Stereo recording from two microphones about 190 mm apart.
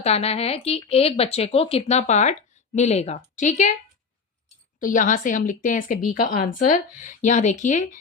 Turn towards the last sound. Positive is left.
turn(degrees=40)  # may be behind; listen again after turning